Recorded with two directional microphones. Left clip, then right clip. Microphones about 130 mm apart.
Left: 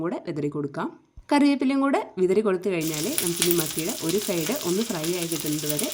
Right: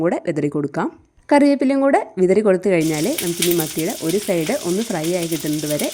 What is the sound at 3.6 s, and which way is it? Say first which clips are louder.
Speech: right 6 dB; 25° right (ahead or behind).